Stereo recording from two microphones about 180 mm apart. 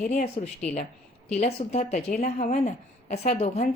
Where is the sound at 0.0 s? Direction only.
40° left (ahead or behind).